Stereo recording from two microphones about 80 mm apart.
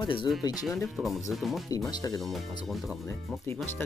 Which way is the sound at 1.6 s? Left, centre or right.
Left.